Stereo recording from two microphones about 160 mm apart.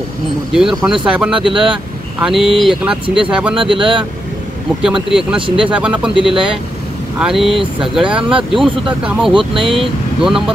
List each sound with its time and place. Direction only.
0.5 s speech: 5° right (ahead or behind)
3.5 s speech: 35° right (ahead or behind)
4.8 s speech: 5° right (ahead or behind)
9.3 s speech: 35° right (ahead or behind)
9.7 s speech: centre (ahead or behind)